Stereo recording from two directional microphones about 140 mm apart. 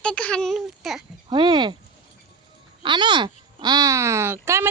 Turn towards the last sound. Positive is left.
turn(degrees=-15)  # may be behind; listen again after turning